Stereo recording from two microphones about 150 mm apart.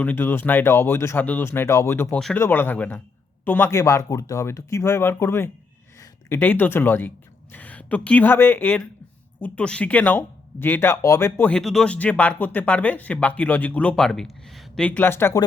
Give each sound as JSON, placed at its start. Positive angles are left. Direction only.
{"t": 0.0, "sound": "speech", "side_deg": 15}